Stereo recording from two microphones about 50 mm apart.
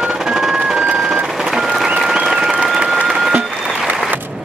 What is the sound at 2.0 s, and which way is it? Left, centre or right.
Applause, centre.